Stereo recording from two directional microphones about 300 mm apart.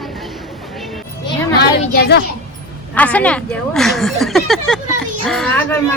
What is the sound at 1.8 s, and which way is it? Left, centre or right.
Speech, left.